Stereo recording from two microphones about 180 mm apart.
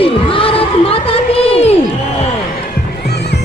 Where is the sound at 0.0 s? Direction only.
30° left (ahead or behind).